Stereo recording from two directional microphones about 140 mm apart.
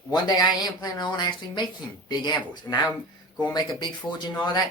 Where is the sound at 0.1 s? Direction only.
30° left (ahead or behind).